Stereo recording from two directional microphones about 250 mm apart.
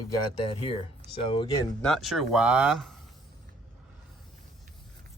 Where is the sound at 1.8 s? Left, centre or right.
Centre.